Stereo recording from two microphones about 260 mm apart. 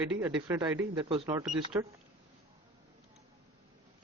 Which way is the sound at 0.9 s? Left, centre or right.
Right.